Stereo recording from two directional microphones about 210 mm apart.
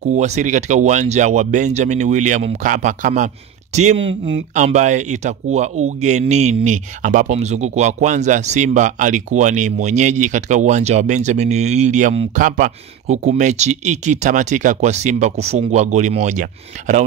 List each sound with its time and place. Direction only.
0.0 s speech: 35° right (ahead or behind)